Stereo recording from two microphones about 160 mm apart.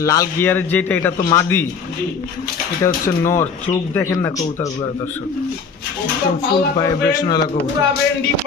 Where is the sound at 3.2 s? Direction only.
20° left (ahead or behind).